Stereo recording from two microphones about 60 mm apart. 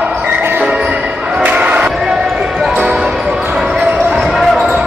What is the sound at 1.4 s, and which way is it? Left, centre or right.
Crowd, right.